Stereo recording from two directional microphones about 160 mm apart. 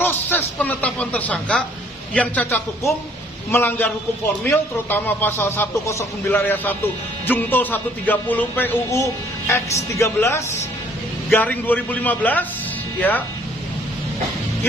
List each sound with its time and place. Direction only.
0.0 s a man's voice: 15° left (ahead or behind)